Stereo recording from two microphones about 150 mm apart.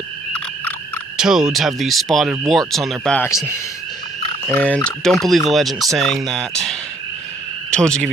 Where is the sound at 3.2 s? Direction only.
20° left (ahead or behind).